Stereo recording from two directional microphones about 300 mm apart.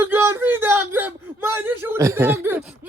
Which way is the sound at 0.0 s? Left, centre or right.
Centre.